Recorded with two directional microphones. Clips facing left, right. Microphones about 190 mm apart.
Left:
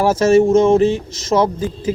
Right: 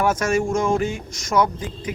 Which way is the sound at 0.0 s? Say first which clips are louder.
Left 8 dB; 25° left (ahead or behind).